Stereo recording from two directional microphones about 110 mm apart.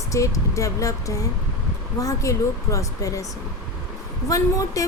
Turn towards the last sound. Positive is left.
turn(degrees=30)  # may be behind; listen again after turning